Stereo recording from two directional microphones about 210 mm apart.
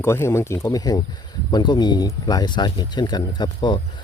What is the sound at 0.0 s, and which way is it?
Speech, 10° left (ahead or behind).